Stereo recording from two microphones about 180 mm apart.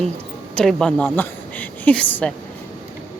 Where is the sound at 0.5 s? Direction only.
5° left (ahead or behind).